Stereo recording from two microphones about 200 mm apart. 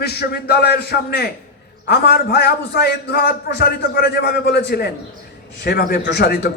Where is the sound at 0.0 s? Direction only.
55° left (ahead or behind).